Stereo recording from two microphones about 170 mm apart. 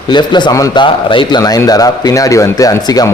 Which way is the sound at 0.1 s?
25° left (ahead or behind).